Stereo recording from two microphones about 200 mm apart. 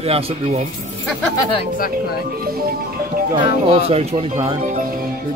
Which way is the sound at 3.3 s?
25° right (ahead or behind).